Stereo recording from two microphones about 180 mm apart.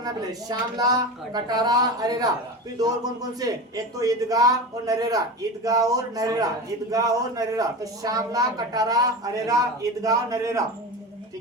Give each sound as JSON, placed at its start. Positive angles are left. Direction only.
{"t": 0.0, "sound": "a man's voice", "side_deg": -20}